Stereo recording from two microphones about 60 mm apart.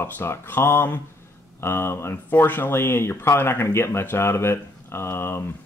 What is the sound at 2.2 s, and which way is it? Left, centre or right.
Speech, left.